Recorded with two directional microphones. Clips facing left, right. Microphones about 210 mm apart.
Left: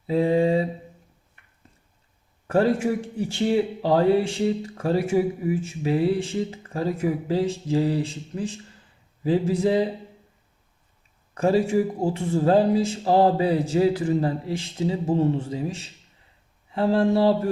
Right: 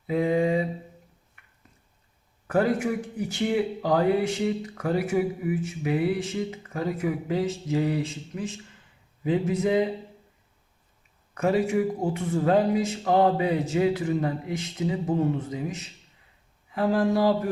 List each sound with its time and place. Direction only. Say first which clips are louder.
0.1 s mantra: left 3 dB; 30° left (ahead or behind)
2.5 s speech: left 3 dB; 25° left (ahead or behind)
11.3 s speech: left 3 dB; 30° left (ahead or behind)